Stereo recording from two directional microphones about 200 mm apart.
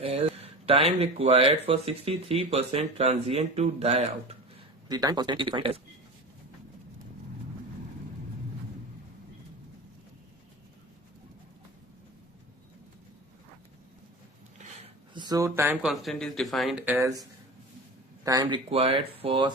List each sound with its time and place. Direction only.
0.0 s speech: 30° right (ahead or behind)
4.9 s speech: 20° right (ahead or behind)
14.8 s speech: 20° right (ahead or behind)